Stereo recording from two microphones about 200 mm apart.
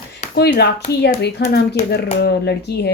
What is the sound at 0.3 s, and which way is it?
Speech, 55° left (ahead or behind).